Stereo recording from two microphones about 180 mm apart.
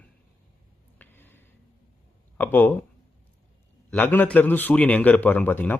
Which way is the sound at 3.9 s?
10° left (ahead or behind).